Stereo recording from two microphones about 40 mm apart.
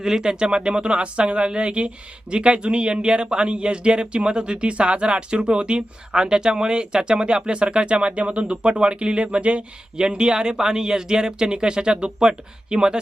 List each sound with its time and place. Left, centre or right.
0.0 s speech: centre